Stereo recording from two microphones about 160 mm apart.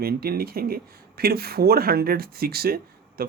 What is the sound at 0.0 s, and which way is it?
Speech, 70° right (ahead or behind).